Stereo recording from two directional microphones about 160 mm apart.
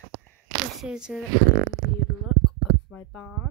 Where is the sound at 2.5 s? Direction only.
5° left (ahead or behind).